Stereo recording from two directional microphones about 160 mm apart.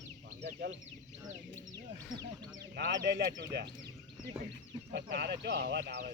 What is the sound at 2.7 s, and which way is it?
Speech, 85° right.